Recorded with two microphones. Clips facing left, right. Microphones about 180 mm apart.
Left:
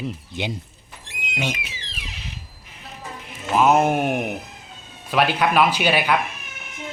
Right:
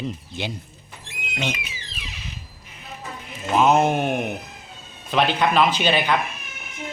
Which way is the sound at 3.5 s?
5° left (ahead or behind).